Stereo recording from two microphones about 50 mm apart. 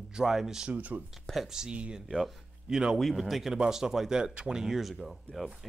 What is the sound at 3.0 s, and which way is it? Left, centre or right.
Speech, centre.